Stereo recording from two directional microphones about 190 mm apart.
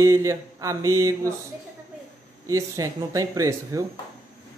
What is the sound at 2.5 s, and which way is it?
Speech, 15° right (ahead or behind).